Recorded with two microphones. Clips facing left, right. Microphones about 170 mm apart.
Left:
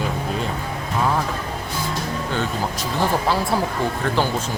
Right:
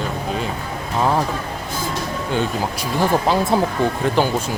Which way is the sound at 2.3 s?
15° right (ahead or behind).